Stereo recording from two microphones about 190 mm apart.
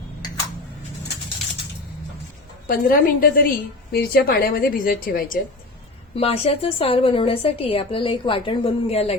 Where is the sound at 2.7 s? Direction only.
50° left (ahead or behind).